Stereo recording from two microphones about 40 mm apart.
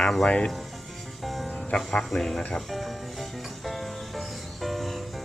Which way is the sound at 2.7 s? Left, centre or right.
Centre.